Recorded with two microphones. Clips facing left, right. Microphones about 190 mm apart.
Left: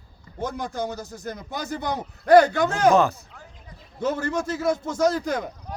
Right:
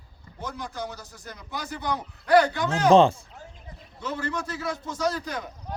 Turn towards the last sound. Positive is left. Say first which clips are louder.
# left 6 dB
turn(degrees=45)  # may be behind; listen again after turning